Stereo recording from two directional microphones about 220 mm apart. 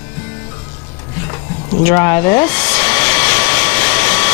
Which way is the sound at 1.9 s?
10° left (ahead or behind).